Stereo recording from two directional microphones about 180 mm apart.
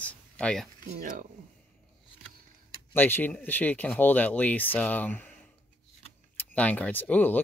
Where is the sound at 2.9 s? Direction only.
10° left (ahead or behind).